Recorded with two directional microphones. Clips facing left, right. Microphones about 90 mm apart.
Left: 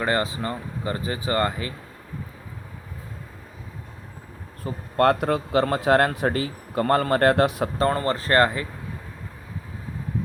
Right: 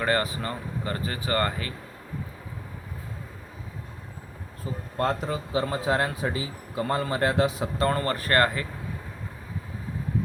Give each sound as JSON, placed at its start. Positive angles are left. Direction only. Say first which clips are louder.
{"t": 0.0, "sound": "speech", "louder": "left 2 dB", "side_deg": 20}
{"t": 4.6, "sound": "speech", "louder": "left 7 dB", "side_deg": 65}
{"t": 7.8, "sound": "speech", "louder": "left 2 dB", "side_deg": 30}